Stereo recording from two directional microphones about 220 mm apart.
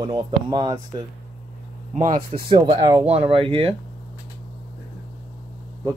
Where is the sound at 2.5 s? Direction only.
20° right (ahead or behind).